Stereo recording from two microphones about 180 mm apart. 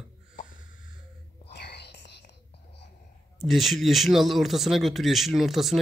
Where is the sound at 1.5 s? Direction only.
70° left (ahead or behind).